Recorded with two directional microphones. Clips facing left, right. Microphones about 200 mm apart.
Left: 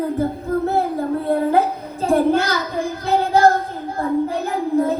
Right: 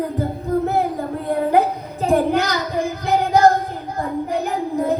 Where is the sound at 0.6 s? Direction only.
15° right (ahead or behind).